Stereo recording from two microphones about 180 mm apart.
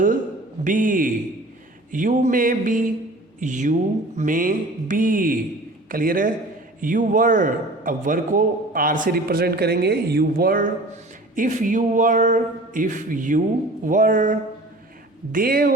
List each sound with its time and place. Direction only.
0.6 s a man's voice: 45° right (ahead or behind)